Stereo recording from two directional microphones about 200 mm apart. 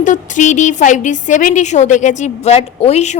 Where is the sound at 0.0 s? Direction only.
40° left (ahead or behind).